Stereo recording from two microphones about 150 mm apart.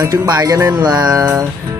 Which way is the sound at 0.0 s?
25° right (ahead or behind).